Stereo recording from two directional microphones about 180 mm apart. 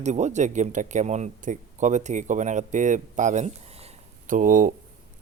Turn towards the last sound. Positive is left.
turn(degrees=-50)  # may be behind; listen again after turning